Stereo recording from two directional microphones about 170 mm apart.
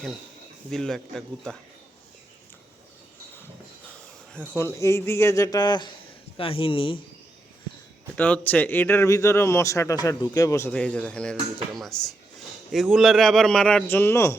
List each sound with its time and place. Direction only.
0.7 s a man's voice: centre (ahead or behind)
4.5 s speech: 15° left (ahead or behind); by 7.0 s 30° left (ahead or behind)
8.1 s a man's voice: 10° left (ahead or behind)